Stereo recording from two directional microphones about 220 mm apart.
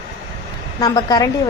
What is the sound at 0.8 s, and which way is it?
Speech, 15° left (ahead or behind).